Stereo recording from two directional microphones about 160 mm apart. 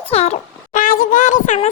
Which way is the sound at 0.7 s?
60° left (ahead or behind).